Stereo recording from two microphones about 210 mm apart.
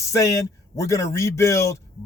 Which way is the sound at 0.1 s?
15° left (ahead or behind).